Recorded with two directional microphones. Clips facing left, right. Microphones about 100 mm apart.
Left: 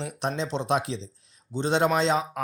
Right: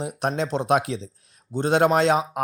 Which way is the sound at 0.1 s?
55° right (ahead or behind).